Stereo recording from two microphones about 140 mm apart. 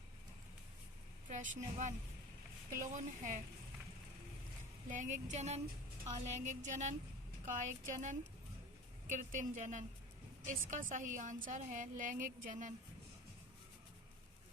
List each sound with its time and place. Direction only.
1.3 s speech: 60° right (ahead or behind)
4.9 s a woman's voice: 65° right (ahead or behind)